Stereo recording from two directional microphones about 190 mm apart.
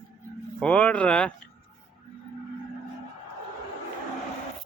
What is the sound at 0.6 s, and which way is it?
Speech, 5° left (ahead or behind).